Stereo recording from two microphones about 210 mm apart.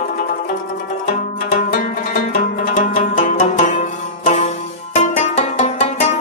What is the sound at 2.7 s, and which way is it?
Music, 40° left (ahead or behind).